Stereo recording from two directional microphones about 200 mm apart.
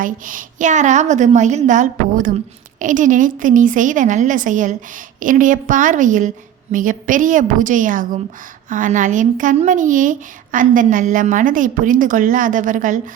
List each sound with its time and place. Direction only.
0.0 s a woman's voice: 40° right (ahead or behind)